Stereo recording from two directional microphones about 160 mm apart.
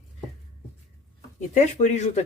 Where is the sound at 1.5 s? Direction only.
45° left (ahead or behind).